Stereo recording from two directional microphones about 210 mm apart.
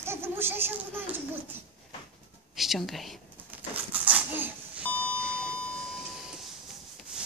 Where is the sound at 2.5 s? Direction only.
Centre (ahead or behind).